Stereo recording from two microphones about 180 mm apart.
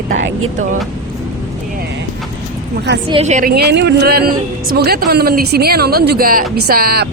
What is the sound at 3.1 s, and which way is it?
Speech, 35° right (ahead or behind).